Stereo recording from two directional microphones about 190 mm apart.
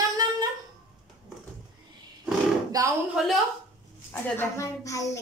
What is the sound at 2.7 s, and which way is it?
Speech, 20° right (ahead or behind).